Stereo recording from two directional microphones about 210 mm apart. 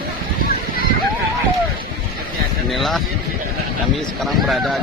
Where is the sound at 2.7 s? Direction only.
Centre (ahead or behind).